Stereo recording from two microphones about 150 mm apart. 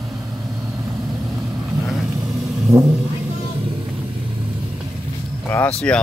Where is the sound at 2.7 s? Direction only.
20° right (ahead or behind).